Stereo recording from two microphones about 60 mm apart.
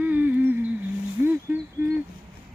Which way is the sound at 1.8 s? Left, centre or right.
Right.